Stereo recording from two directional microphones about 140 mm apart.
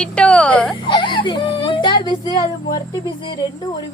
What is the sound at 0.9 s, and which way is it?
Whimper, 35° left (ahead or behind).